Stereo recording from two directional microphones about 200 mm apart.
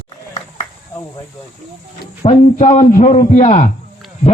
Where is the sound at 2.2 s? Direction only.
35° left (ahead or behind).